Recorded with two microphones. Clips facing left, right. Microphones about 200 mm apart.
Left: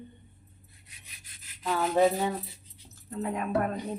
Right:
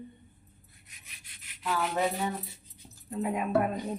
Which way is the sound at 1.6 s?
30° left (ahead or behind).